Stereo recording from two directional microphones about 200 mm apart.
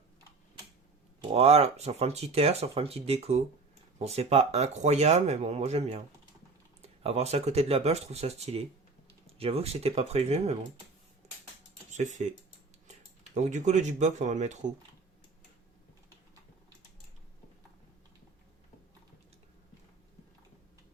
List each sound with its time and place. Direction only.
1.2 s speech: 30° right (ahead or behind)
11.9 s speech: 35° right (ahead or behind)